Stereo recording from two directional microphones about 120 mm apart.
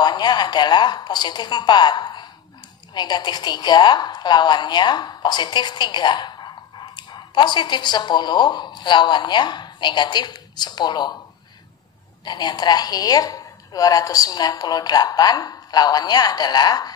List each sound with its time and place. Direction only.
0.0 s a woman's voice: 35° left (ahead or behind)
12.3 s a woman's voice: 35° left (ahead or behind)